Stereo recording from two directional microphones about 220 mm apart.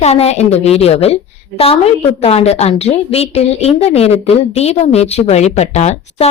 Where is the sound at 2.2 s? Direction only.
25° left (ahead or behind).